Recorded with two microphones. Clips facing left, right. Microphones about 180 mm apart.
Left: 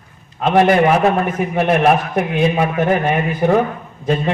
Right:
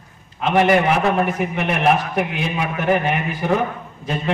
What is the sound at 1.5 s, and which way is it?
A man's voice, 45° left (ahead or behind).